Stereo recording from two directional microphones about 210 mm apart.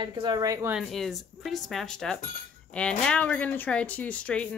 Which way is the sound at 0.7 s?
Centre (ahead or behind).